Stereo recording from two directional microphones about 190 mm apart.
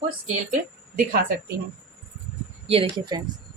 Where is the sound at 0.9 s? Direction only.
50° right (ahead or behind).